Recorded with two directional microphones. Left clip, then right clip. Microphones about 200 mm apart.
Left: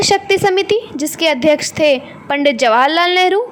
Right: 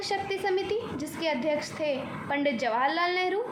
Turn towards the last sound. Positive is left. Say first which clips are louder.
# left 15 dB
turn(degrees=50)  # may be behind; listen again after turning